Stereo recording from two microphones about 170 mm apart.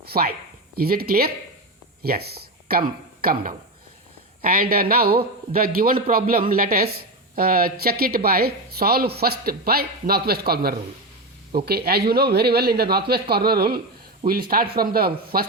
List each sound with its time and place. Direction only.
0.0 s speech: 65° right (ahead or behind)